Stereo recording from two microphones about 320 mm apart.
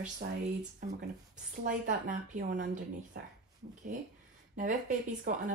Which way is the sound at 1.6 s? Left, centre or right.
Right.